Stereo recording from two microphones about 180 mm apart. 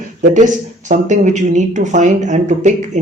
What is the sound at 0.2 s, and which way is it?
Speech, 45° right (ahead or behind).